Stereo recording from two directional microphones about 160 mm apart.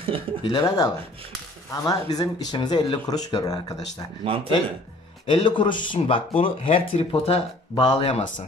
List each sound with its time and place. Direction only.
0.4 s speech: 25° left (ahead or behind)
4.2 s speech: 35° right (ahead or behind)
5.2 s speech: 30° left (ahead or behind)